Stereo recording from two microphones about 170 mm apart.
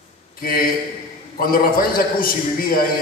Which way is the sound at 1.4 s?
60° left (ahead or behind).